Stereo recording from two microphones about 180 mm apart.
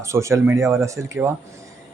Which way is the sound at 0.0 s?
15° right (ahead or behind).